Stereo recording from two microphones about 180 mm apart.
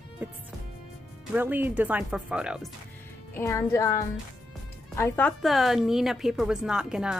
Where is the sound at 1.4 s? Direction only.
10° right (ahead or behind).